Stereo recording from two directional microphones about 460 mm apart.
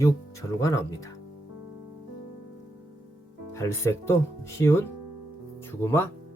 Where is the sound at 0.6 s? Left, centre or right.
Centre.